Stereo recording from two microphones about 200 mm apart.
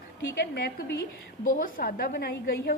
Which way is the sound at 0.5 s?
50° left (ahead or behind).